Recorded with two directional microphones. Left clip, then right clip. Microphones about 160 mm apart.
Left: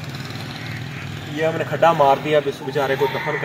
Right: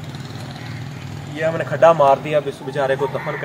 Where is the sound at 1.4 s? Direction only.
15° right (ahead or behind).